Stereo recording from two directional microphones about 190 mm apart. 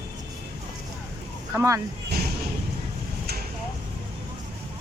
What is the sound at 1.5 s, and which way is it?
Speech, 15° right (ahead or behind).